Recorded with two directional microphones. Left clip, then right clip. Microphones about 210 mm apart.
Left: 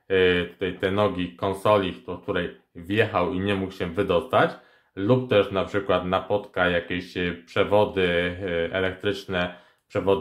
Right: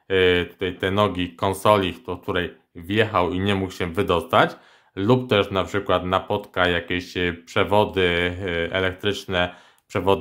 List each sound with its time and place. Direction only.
0.1 s speech: 25° right (ahead or behind)